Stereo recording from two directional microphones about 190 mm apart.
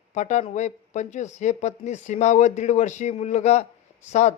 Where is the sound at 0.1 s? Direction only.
40° left (ahead or behind).